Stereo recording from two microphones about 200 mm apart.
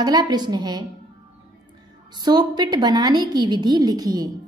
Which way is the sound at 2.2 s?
20° right (ahead or behind).